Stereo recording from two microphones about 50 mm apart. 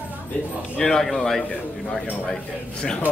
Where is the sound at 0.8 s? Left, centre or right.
Centre.